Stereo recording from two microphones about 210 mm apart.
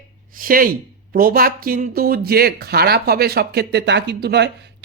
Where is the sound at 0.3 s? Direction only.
40° right (ahead or behind).